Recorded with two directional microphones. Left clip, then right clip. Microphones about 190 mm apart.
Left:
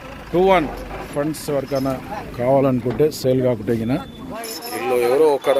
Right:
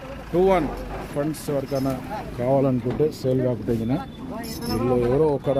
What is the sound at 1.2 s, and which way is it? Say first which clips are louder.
Speech: left 4 dB; 10° left (ahead or behind).